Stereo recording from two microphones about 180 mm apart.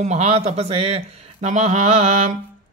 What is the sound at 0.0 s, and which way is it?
A man's voice, 35° right (ahead or behind).